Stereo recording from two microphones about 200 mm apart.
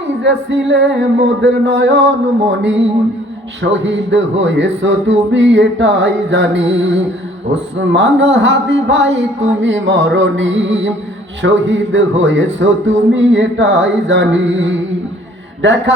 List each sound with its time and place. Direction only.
0.2 s speech: 65° right (ahead or behind)
9.5 s music: 65° right (ahead or behind)
11.4 s speech: 65° right (ahead or behind)